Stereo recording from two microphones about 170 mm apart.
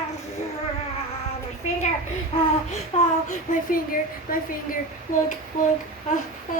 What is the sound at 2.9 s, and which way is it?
Speech, 35° left (ahead or behind).